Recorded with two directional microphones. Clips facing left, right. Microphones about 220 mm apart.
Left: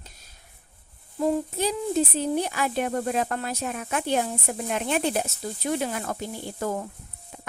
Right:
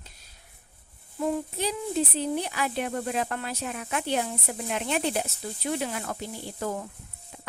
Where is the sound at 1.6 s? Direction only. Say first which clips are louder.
Left 3 dB; 45° left (ahead or behind).